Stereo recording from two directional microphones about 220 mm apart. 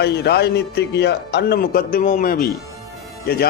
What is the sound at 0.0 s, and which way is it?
A man's voice, 50° left (ahead or behind).